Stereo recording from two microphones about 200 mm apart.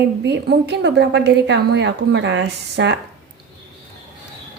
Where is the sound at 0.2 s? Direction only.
60° right (ahead or behind).